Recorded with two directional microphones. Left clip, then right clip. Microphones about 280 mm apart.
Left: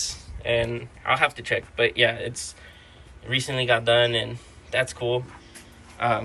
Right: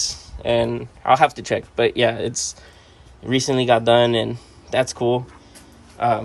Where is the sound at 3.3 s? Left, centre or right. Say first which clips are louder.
Right 5 dB; centre.